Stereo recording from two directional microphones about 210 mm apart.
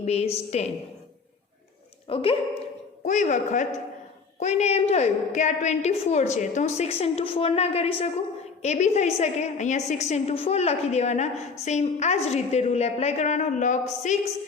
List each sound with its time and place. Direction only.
0.0 s a woman's voice: 30° left (ahead or behind)
2.0 s speech: 25° left (ahead or behind)
3.0 s a woman's voice: 35° left (ahead or behind)